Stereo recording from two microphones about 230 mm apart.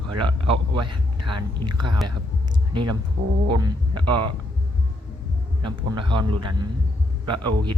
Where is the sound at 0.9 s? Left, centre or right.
Right.